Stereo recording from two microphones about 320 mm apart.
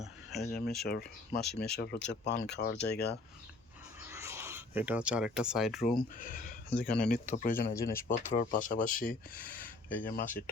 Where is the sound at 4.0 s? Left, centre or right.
Centre.